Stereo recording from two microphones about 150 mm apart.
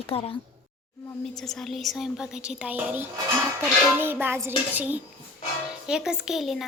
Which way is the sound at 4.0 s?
15° right (ahead or behind).